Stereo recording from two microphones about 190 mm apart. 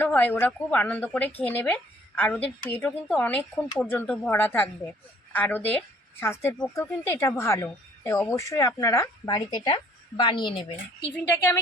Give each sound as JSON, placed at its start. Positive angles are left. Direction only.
{"t": 0.0, "sound": "a woman's voice", "side_deg": 10}